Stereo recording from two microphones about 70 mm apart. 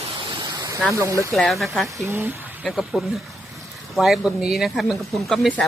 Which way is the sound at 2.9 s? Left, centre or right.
Centre.